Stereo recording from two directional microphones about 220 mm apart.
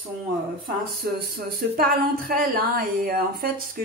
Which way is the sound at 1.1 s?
40° right (ahead or behind).